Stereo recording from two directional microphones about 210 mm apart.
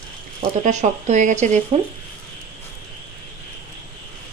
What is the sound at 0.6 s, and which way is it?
Speech, 35° right (ahead or behind).